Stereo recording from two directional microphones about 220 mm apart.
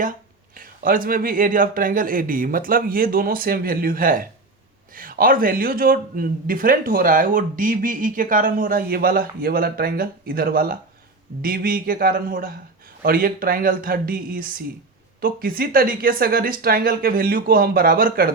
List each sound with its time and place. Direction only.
0.0 s a man's voice: 40° right (ahead or behind)